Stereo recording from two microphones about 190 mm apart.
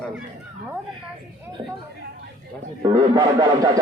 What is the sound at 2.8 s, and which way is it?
Speech, 20° right (ahead or behind).